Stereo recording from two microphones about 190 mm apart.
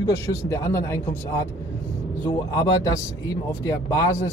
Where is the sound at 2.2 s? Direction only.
15° left (ahead or behind).